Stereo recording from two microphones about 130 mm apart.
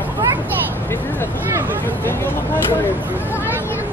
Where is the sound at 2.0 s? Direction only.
15° left (ahead or behind).